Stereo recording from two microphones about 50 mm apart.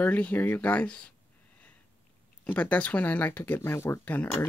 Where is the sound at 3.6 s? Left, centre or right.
Left.